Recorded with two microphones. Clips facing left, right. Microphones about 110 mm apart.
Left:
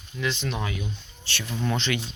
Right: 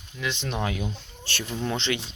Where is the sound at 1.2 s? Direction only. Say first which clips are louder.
Right 2 dB; 45° right (ahead or behind).